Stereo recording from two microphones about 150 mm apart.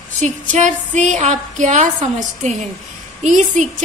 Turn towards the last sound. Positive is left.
turn(degrees=-55)  # may be behind; listen again after turning